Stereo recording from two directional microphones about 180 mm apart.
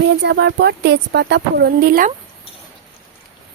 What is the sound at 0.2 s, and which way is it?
A woman's voice, 70° right (ahead or behind).